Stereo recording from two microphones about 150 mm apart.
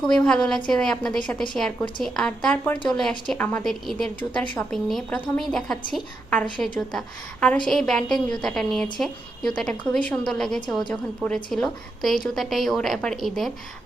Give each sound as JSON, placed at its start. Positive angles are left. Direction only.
{"t": 0.0, "sound": "a woman's voice", "side_deg": 5}
{"t": 2.7, "sound": "speech", "side_deg": 35}
{"t": 3.0, "sound": "a woman's voice", "side_deg": 5}